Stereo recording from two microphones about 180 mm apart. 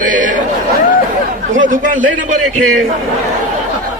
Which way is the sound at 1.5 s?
50° right (ahead or behind).